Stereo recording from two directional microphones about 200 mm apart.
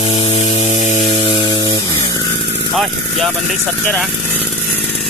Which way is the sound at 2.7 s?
Centre (ahead or behind).